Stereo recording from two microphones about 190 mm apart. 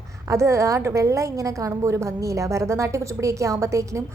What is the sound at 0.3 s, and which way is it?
A woman's voice, 15° right (ahead or behind).